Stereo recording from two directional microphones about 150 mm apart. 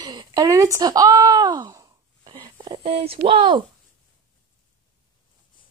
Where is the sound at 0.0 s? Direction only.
30° right (ahead or behind).